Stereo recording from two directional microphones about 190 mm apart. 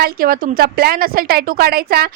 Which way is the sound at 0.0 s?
50° right (ahead or behind).